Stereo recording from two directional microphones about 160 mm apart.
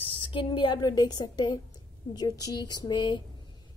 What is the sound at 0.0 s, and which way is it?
Speech, 35° left (ahead or behind).